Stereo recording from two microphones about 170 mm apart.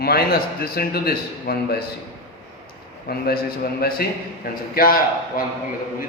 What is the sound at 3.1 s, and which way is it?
A man's voice, 60° left (ahead or behind).